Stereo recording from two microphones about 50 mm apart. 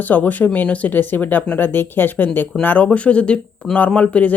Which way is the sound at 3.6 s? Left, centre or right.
Centre.